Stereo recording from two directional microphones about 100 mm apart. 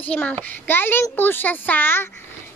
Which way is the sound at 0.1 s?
15° left (ahead or behind).